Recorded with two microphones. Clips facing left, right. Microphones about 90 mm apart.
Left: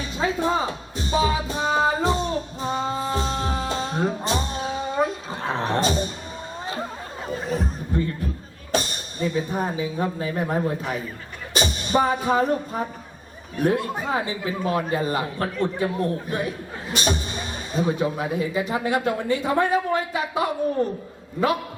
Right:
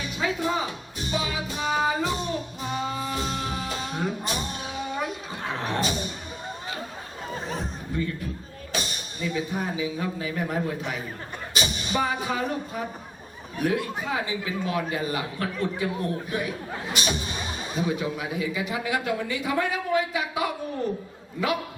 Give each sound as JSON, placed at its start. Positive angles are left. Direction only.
{"t": 0.0, "sound": "speech", "side_deg": 35}
{"t": 1.1, "sound": "music", "side_deg": 35}
{"t": 7.5, "sound": "a sound", "side_deg": 40}
{"t": 9.2, "sound": "speech", "side_deg": 40}